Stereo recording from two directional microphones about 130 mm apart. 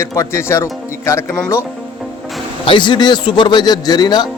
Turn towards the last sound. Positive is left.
turn(degrees=30)  # may be behind; listen again after turning